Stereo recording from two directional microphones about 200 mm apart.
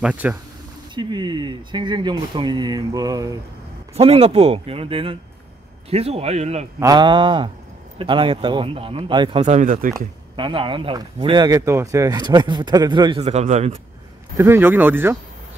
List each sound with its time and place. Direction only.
0.0 s speech: 5° right (ahead or behind)
0.9 s speech: 20° right (ahead or behind)
3.9 s speech: 30° right (ahead or behind)
6.8 s speech: 20° right (ahead or behind)
9.5 s speech: 40° right (ahead or behind)
9.9 s speech: 25° right (ahead or behind)
14.3 s speech: 15° right (ahead or behind)